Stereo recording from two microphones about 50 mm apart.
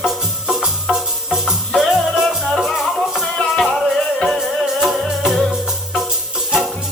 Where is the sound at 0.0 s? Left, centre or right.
Centre.